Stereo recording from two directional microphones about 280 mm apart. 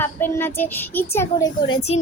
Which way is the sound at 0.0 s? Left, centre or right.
Centre.